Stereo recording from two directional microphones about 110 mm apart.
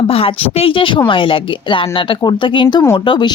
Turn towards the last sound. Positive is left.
turn(degrees=45)  # may be behind; listen again after turning